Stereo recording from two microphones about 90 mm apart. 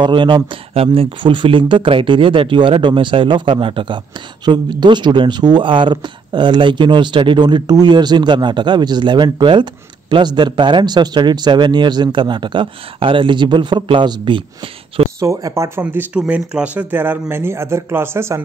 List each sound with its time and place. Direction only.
0.0 s speech: 60° right (ahead or behind)
4.5 s speech: 55° right (ahead or behind)
15.1 s speech: 35° right (ahead or behind)
15.8 s speech: 20° right (ahead or behind)